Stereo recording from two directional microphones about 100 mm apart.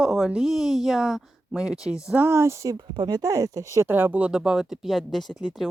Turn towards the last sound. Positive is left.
turn(degrees=0)  # may be behind; listen again after turning